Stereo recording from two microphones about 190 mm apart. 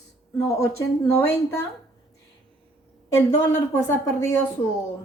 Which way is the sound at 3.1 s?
15° left (ahead or behind).